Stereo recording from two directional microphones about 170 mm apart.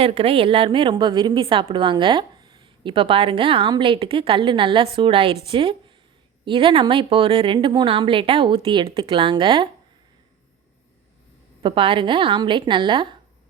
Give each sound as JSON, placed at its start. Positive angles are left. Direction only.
{"t": 0.0, "sound": "a woman's voice", "side_deg": -35}
{"t": 11.6, "sound": "a woman's voice", "side_deg": -30}